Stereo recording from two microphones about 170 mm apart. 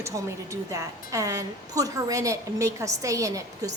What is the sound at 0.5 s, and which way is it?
A woman's voice, 20° right (ahead or behind).